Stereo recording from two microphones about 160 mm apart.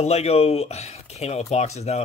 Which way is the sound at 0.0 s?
40° left (ahead or behind).